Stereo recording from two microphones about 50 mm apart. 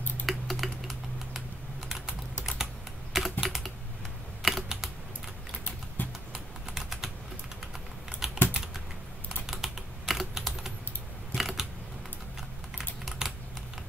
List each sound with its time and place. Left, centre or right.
0.3 s typing: centre
3.4 s computer keyboard: centre
6.0 s typing: left
6.3 s typing: centre
8.2 s typing: centre
9.5 s typing: centre
11.3 s camera: centre
13.2 s typing: centre